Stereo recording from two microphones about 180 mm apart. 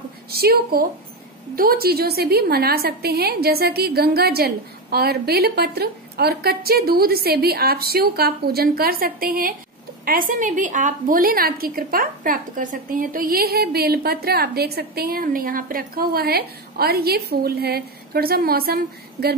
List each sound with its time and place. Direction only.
0.3 s a woman's voice: 60° right (ahead or behind)